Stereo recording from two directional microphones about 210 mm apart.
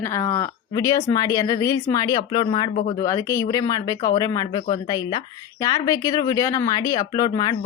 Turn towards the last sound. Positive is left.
turn(degrees=20)  # may be behind; listen again after turning